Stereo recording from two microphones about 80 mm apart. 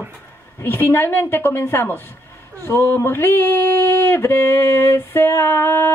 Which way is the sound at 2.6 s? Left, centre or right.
Left.